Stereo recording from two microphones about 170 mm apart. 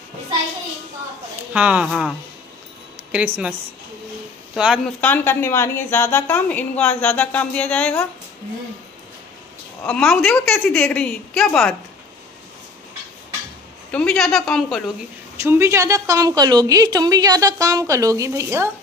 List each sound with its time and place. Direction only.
1.5 s speech: 5° right (ahead or behind)
4.6 s a woman's voice: 5° right (ahead or behind)
5.0 s a woman's voice: 10° left (ahead or behind)
9.8 s a woman's voice: 10° left (ahead or behind)
13.9 s a woman's voice: 5° left (ahead or behind)
15.4 s a woman's voice: 15° right (ahead or behind)